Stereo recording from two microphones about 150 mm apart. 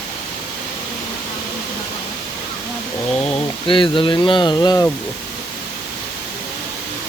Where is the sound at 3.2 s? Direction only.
35° left (ahead or behind).